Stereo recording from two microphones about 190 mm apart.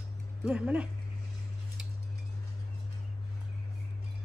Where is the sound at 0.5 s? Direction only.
5° right (ahead or behind).